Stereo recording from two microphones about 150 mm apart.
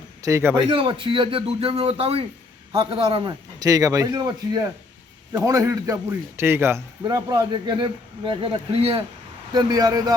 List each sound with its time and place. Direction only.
0.2 s speech: 20° right (ahead or behind)
0.7 s a man's voice: 35° right (ahead or behind)
9.5 s a man's voice: 25° right (ahead or behind)